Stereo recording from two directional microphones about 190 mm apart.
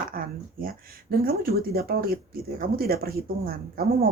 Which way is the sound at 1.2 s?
50° right (ahead or behind).